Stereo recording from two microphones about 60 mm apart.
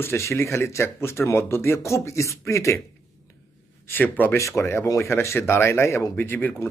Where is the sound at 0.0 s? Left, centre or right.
Left.